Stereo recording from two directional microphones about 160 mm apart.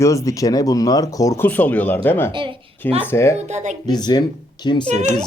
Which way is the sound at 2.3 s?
35° right (ahead or behind).